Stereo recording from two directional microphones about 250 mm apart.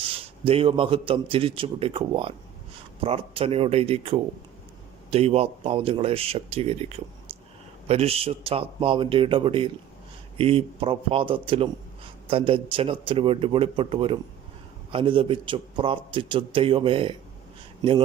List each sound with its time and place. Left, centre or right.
0.0 s a man's voice: right